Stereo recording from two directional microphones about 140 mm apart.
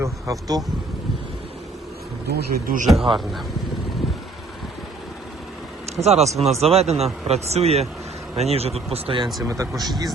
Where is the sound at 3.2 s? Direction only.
Centre (ahead or behind).